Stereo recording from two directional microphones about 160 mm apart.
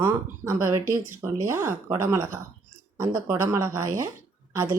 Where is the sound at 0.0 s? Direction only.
20° right (ahead or behind).